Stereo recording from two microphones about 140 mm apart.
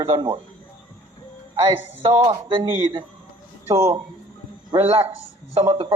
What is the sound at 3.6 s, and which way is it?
A man's voice, 45° right (ahead or behind).